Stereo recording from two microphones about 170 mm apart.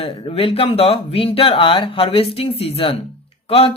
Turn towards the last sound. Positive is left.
turn(degrees=35)  # may be behind; listen again after turning